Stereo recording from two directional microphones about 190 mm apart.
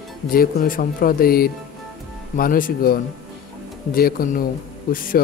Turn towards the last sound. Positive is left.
turn(degrees=45)  # may be behind; listen again after turning